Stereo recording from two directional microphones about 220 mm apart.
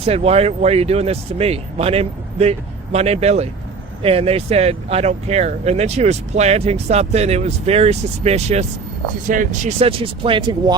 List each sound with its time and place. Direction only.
0.0 s speech: 25° right (ahead or behind)